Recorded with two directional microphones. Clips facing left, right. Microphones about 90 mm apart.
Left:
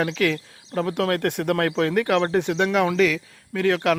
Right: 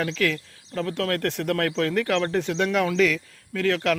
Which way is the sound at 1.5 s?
15° left (ahead or behind).